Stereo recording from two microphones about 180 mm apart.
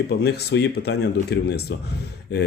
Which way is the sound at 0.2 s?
65° left (ahead or behind).